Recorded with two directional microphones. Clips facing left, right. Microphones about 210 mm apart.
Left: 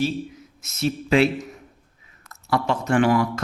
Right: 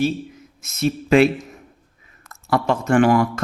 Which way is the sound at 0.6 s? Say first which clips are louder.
Right 3 dB; 50° right (ahead or behind).